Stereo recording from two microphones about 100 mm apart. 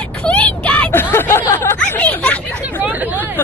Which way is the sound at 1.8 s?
15° left (ahead or behind).